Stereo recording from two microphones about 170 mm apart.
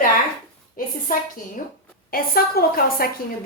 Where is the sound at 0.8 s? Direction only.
55° left (ahead or behind).